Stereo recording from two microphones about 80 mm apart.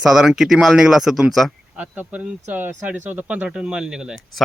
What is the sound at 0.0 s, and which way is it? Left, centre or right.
Speech, centre.